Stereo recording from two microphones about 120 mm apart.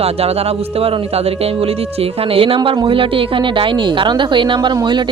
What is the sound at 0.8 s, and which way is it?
A man's voice, 55° right (ahead or behind).